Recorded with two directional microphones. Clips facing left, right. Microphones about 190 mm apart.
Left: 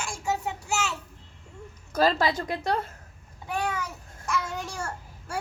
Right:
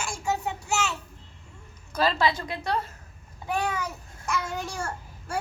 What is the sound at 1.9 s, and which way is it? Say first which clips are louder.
Speech: left 1 dB; 45° left (ahead or behind).